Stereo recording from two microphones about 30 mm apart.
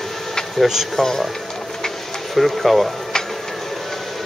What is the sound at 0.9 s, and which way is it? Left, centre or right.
Speech, centre.